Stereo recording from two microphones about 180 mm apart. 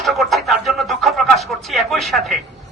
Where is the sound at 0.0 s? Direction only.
Centre (ahead or behind).